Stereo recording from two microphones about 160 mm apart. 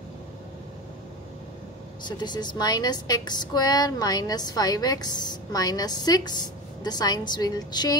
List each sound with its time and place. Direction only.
2.0 s a woman's voice: 25° left (ahead or behind)